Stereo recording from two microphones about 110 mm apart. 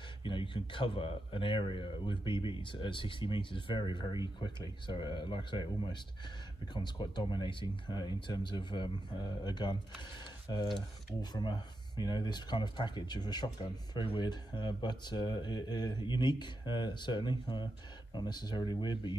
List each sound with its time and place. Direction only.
0.2 s speech: 50° left (ahead or behind)
11.1 s speech: 40° left (ahead or behind)